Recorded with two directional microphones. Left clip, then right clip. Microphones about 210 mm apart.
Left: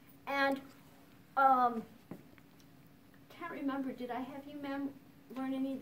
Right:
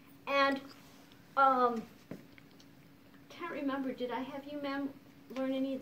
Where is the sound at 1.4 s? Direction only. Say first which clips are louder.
Even; 15° left (ahead or behind).